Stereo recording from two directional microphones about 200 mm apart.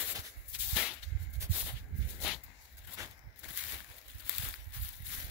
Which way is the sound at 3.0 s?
15° right (ahead or behind).